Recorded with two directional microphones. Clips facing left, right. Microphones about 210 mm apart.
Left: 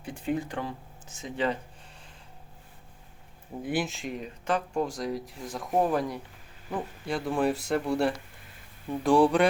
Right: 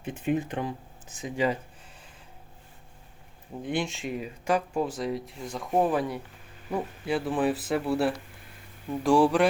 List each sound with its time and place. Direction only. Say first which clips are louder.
0.0 s speech: right 3 dB; 20° right (ahead or behind)
3.6 s speech: even; 5° left (ahead or behind)